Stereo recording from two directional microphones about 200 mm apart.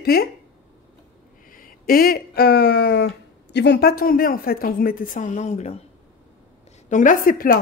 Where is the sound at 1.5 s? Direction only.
45° left (ahead or behind).